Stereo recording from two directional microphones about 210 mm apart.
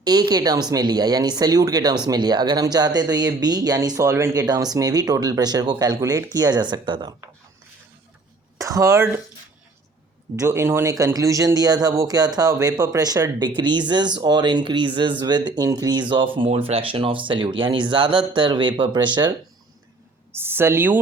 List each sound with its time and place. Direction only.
0.0 s speech: 20° right (ahead or behind)
8.5 s speech: 15° right (ahead or behind)
10.3 s speech: 10° right (ahead or behind)
20.3 s a woman's voice: 10° right (ahead or behind)